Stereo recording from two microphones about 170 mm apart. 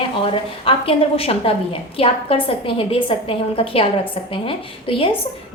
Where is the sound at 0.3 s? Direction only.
30° left (ahead or behind).